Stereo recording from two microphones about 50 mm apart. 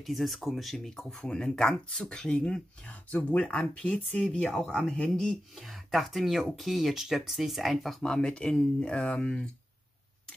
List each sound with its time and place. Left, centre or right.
0.0 s speech: centre
2.9 s speech: left; by 5.4 s centre
5.6 s speech: centre
8.0 s speech: centre